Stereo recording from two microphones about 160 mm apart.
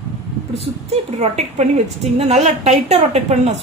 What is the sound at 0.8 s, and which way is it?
A woman's voice, 40° right (ahead or behind).